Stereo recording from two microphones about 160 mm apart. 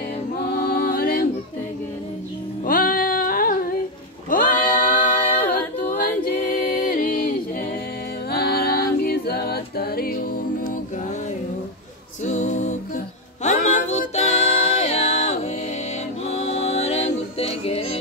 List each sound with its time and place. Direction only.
0.5 s music: 65° left (ahead or behind)
2.6 s music: 65° left (ahead or behind)
4.3 s a capella: 60° left (ahead or behind)
8.3 s a capella: 85° left; by 10.8 s 65° left (ahead or behind)
12.3 s music: 50° left (ahead or behind)